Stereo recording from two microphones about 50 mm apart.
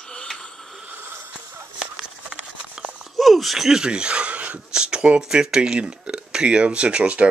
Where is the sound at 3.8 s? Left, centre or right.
Centre.